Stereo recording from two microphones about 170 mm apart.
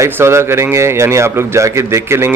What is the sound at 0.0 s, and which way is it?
A man's voice, 15° right (ahead or behind).